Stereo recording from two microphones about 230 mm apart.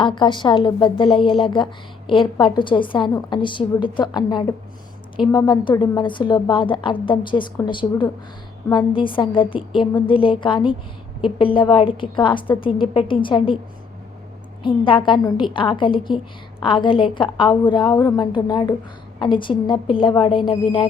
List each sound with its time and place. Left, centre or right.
0.0 s a woman's voice: centre
14.6 s a woman's voice: left